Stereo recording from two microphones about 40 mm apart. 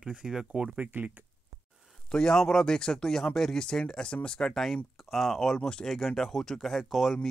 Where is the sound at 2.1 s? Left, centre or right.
Centre.